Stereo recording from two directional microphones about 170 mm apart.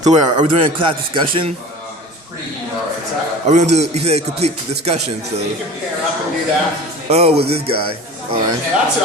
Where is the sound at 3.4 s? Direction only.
40° right (ahead or behind).